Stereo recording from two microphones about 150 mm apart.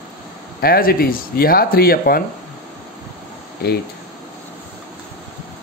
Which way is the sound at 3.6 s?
90° left.